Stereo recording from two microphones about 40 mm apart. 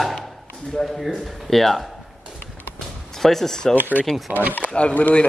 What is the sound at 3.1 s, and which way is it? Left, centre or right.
Speech, centre.